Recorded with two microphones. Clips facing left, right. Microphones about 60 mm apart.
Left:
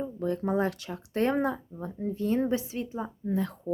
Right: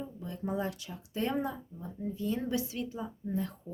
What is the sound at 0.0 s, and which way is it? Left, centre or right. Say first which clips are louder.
Speech: left 9 dB; left.